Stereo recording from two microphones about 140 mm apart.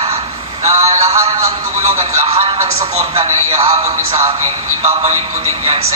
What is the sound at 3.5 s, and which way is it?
Speech, 45° right (ahead or behind).